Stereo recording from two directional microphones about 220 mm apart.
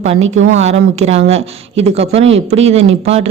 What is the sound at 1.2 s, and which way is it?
A woman's voice, 30° right (ahead or behind).